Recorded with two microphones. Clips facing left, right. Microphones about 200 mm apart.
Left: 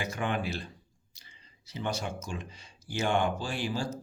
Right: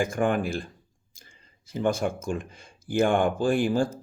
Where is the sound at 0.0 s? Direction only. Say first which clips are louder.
Right 8 dB; 50° right (ahead or behind).